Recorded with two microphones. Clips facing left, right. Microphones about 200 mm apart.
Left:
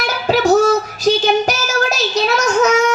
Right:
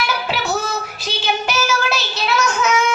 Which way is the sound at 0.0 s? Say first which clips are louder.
Left 7 dB; 45° left (ahead or behind).